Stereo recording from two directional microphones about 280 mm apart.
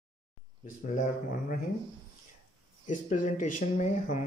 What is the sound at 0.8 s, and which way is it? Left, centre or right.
Speech, left.